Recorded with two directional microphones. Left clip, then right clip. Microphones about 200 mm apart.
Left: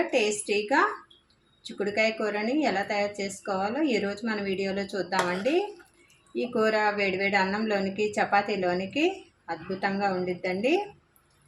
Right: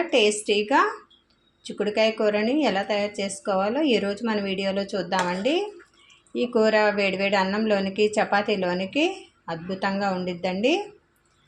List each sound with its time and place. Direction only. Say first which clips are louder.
0.1 s a woman's voice: right 5 dB; 35° right (ahead or behind)
6.3 s a woman's voice: right 5 dB; 35° right (ahead or behind)